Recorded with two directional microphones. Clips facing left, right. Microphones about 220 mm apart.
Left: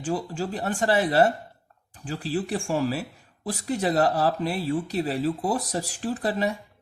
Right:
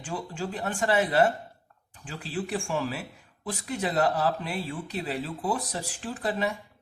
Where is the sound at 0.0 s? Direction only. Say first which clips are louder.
Left 5 dB; 40° left (ahead or behind).